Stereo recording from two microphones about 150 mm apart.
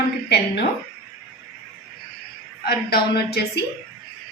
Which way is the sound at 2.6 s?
90° left.